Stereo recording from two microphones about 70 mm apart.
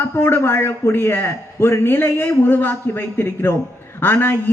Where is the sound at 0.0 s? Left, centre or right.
Left.